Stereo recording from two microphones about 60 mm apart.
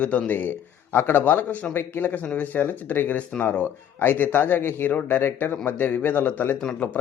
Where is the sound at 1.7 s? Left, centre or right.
Left.